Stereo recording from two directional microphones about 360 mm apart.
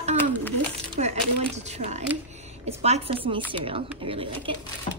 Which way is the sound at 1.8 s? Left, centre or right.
Centre.